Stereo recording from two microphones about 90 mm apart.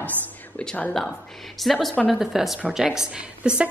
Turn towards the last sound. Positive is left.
turn(degrees=-10)  # may be behind; listen again after turning